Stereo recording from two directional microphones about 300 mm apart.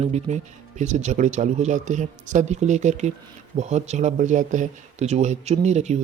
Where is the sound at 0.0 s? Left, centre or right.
Right.